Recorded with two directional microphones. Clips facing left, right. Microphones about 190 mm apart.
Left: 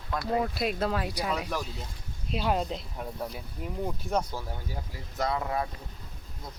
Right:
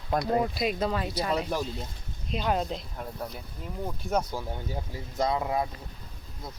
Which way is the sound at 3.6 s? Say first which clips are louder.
Left 4 dB; 10° left (ahead or behind).